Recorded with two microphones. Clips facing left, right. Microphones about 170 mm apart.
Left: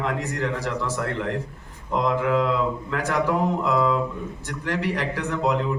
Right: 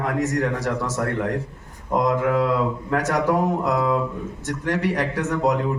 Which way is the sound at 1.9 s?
45° right (ahead or behind).